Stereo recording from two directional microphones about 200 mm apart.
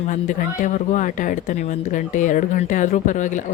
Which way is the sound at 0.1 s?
40° left (ahead or behind).